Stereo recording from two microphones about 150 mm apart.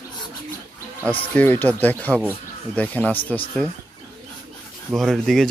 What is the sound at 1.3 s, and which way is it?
A man's voice, 10° left (ahead or behind).